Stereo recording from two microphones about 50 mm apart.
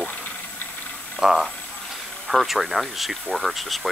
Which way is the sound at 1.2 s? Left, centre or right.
Centre.